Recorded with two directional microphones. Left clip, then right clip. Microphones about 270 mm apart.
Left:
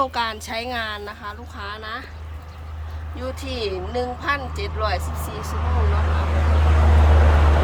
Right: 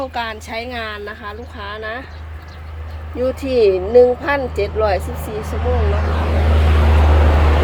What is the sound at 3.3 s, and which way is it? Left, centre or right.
Speech, centre.